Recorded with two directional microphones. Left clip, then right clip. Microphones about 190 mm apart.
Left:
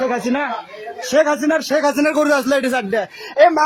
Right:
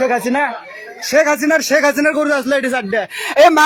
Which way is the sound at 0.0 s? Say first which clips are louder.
Right 4 dB; 10° right (ahead or behind).